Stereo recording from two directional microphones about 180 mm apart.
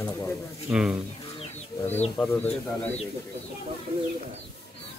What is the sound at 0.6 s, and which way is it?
Speech, 5° right (ahead or behind).